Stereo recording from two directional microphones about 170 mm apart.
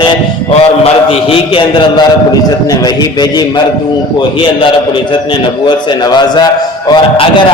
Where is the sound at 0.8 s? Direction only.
30° left (ahead or behind).